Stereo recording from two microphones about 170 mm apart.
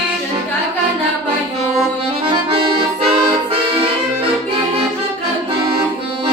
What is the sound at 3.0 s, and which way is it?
Accordion, 35° right (ahead or behind).